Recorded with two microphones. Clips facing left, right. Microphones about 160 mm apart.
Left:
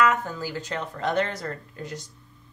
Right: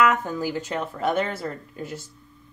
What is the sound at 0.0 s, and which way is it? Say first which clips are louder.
Speech: right 2 dB; 10° right (ahead or behind).